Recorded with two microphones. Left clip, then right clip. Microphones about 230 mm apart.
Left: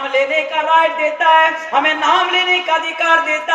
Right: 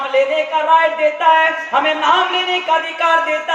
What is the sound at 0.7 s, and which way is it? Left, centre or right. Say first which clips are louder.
A man's voice: right 1 dB; left.